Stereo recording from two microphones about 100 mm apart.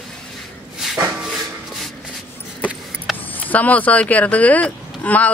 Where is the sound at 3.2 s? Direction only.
15° left (ahead or behind).